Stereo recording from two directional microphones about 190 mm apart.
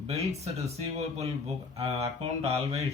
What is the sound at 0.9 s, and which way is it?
Speech, 35° right (ahead or behind).